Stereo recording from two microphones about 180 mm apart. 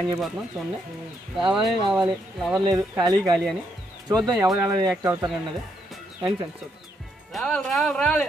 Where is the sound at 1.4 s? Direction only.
25° right (ahead or behind).